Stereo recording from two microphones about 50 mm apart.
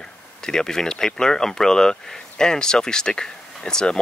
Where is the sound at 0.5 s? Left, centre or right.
Centre.